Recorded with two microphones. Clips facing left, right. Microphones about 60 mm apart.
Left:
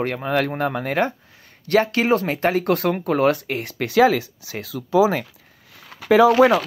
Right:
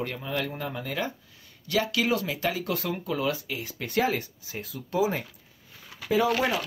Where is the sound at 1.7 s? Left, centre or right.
Left.